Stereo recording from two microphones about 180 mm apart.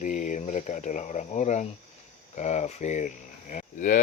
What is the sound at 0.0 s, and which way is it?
Speech, 45° left (ahead or behind).